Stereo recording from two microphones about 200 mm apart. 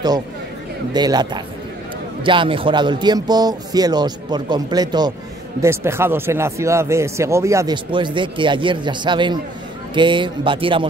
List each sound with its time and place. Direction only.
0.9 s speech: 20° right (ahead or behind)